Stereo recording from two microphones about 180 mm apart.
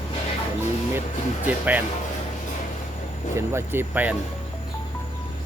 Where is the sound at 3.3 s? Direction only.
15° right (ahead or behind).